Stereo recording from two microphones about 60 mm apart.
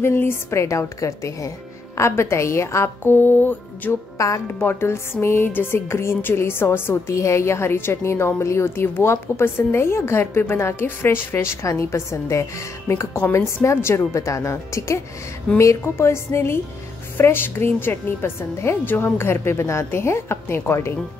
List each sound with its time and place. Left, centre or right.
0.0 s a woman's voice: left
3.0 s a woman's voice: left
7.2 s a woman's voice: left
11.3 s a woman's voice: left
13.9 s speech: left
15.8 s a woman's voice: left